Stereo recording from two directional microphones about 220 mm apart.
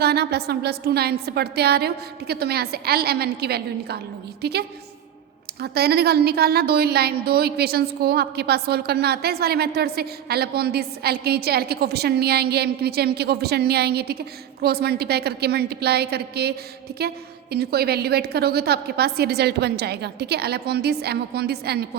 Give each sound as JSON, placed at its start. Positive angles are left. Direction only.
{"t": 0.0, "sound": "speech", "side_deg": -45}